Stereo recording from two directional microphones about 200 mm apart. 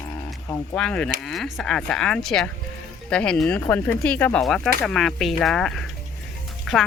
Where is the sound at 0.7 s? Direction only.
5° left (ahead or behind).